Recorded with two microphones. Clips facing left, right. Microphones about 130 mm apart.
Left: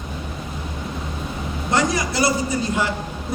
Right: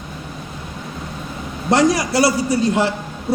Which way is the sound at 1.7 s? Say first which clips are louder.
Right 6 dB; 85° right.